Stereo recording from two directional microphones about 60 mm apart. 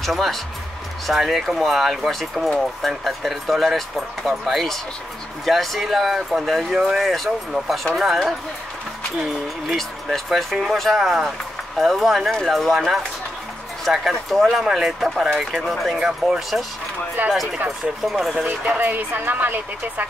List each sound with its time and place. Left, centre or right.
0.0 s speech: centre
9.7 s speech: centre
13.9 s speech: centre
18.7 s a woman's voice: right